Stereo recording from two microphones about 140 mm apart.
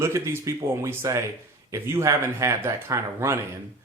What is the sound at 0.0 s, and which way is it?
Speech, 20° right (ahead or behind).